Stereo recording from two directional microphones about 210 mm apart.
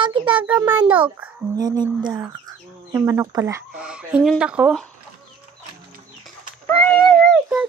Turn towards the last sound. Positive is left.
turn(degrees=0)  # may be behind; listen again after turning